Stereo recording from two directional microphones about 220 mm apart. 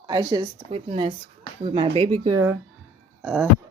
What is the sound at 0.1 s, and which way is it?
Speech, 20° right (ahead or behind).